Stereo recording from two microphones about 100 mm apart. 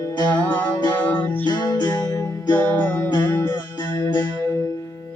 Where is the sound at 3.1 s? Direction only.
45° left (ahead or behind).